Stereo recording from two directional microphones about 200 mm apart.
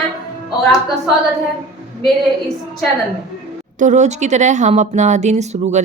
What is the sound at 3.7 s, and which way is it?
A woman's voice, 35° right (ahead or behind).